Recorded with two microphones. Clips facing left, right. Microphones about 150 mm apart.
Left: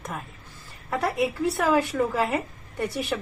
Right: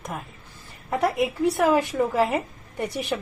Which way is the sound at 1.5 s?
15° right (ahead or behind).